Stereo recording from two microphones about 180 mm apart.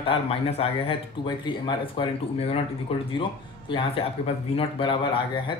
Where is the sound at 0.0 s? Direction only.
30° left (ahead or behind).